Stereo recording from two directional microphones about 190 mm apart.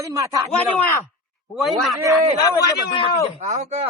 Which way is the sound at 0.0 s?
15° right (ahead or behind).